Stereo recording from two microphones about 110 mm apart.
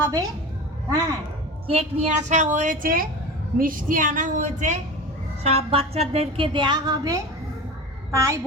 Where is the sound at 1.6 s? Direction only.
70° right (ahead or behind); by 2.7 s 90° right.